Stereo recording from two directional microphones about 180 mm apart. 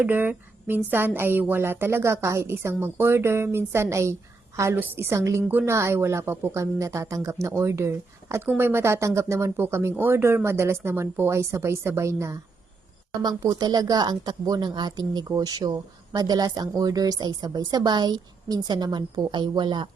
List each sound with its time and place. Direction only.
0.0 s a woman's voice: 10° right (ahead or behind)